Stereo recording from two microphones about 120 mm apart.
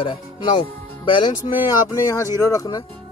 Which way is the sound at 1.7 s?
25° left (ahead or behind).